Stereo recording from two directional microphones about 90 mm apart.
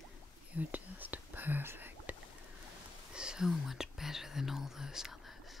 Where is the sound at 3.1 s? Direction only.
10° right (ahead or behind).